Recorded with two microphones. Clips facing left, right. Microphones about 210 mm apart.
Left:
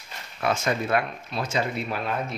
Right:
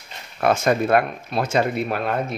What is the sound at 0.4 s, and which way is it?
Speech, 55° right (ahead or behind).